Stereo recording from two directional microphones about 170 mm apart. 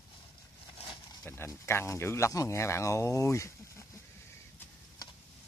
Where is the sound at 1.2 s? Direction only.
15° left (ahead or behind).